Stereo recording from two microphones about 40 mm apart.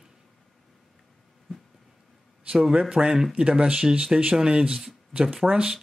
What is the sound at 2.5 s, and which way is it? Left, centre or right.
Speech, centre.